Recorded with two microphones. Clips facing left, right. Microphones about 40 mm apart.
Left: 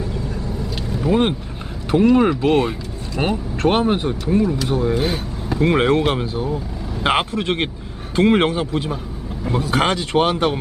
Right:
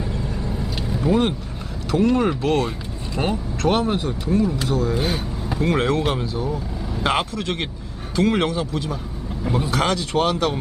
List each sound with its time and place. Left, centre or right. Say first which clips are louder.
0.1 s vehicle: left 1 dB; centre
0.8 s vehicle: even; centre
1.1 s speech: left 2 dB; left
1.9 s a man's voice: left 4 dB; left
2.4 s speech: left 4 dB; left
4.9 s vehicle: left 2 dB; centre
5.5 s a man's voice: left 4 dB; left